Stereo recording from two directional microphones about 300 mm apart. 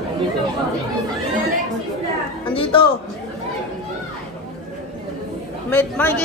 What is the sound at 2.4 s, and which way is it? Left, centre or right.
Speech, centre.